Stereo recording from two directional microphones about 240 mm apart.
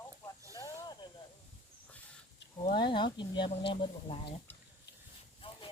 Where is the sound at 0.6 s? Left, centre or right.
Centre.